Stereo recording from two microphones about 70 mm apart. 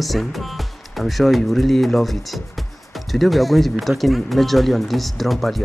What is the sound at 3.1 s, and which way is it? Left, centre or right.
Speech, centre.